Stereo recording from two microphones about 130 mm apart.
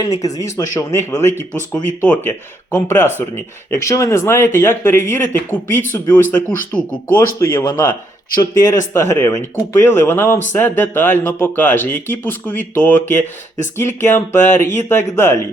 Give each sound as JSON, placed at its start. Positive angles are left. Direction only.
{"t": 0.2, "sound": "speech", "side_deg": 25}
{"t": 7.6, "sound": "speech", "side_deg": 30}
{"t": 8.9, "sound": "speech", "side_deg": 20}